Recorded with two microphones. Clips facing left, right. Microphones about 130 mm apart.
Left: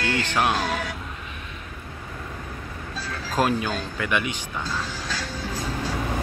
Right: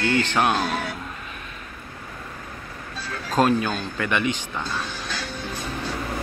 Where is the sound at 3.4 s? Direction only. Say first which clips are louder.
Right 3 dB; 10° left (ahead or behind).